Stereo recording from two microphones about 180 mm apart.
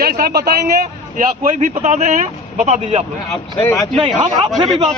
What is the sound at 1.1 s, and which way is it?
A man's voice, 45° right (ahead or behind).